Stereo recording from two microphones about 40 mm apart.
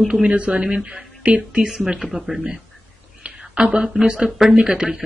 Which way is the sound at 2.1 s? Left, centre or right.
Centre.